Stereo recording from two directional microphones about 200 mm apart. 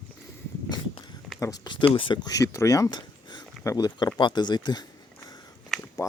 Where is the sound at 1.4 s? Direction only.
20° left (ahead or behind).